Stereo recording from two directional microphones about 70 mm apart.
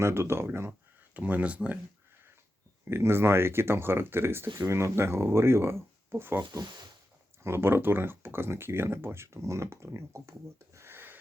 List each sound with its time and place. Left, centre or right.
0.0 s speech: right
1.1 s speech: right
2.9 s speech: right
7.4 s speech: right
10.8 s a sound: right